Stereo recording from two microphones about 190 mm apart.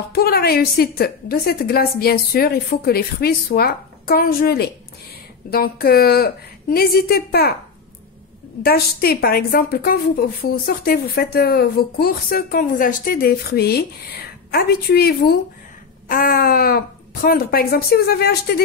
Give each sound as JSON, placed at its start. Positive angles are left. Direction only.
{"t": 0.1, "sound": "a woman's voice", "side_deg": 55}
{"t": 8.6, "sound": "a woman's voice", "side_deg": 55}